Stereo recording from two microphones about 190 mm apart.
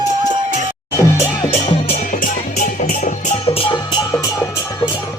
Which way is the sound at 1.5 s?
35° left (ahead or behind).